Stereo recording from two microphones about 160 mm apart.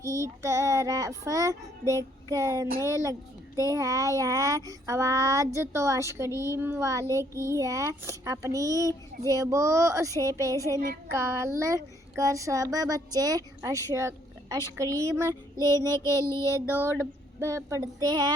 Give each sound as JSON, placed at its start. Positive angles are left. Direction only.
{"t": 0.0, "sound": "speech", "side_deg": -20}